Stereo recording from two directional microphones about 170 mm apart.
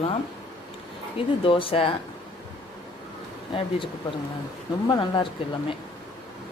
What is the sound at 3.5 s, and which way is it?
Speech, 30° left (ahead or behind).